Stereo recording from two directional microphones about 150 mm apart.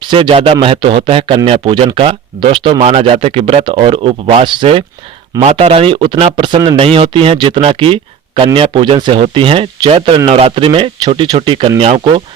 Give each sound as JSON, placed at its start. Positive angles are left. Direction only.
{"t": 0.1, "sound": "speech", "side_deg": -35}